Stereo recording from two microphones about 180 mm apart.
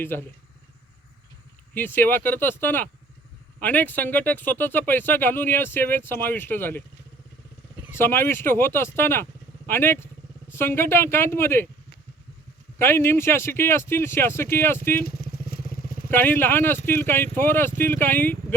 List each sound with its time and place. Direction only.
1.7 s speech: 10° left (ahead or behind)
7.9 s speech: 15° left (ahead or behind)
12.8 s speech: 15° left (ahead or behind)
15.0 s motorcycle: 60° left (ahead or behind)
16.0 s speech: 10° left (ahead or behind)